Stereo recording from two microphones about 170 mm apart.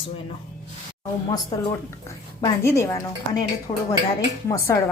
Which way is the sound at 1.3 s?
20° left (ahead or behind).